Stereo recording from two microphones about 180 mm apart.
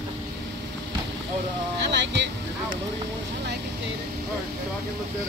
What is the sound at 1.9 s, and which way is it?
Speech, 75° right (ahead or behind).